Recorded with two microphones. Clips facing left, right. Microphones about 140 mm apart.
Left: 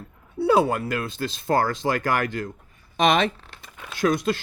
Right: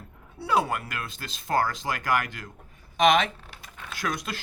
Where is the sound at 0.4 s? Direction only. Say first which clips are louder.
Left 6 dB; 30° left (ahead or behind).